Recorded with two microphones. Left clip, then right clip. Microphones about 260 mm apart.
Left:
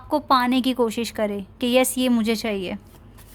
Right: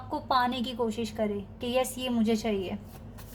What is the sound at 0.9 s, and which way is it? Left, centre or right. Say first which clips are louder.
A woman's voice: left 6 dB; left.